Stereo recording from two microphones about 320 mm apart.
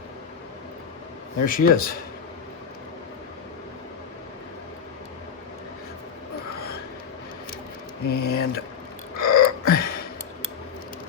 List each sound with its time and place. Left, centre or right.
1.5 s speech: left
8.0 s speech: left
9.1 s burping: left